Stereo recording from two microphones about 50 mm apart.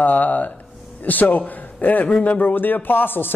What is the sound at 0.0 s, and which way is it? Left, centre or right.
A man's voice, left.